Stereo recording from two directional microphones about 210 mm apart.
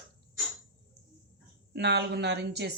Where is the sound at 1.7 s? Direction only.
50° right (ahead or behind).